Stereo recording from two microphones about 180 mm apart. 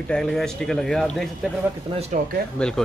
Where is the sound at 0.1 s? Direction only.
5° left (ahead or behind).